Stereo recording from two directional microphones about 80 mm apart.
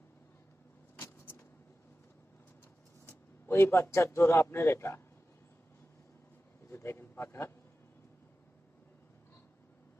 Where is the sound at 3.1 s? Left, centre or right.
Left.